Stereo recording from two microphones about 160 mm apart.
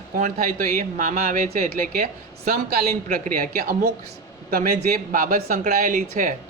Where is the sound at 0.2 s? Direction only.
60° right (ahead or behind).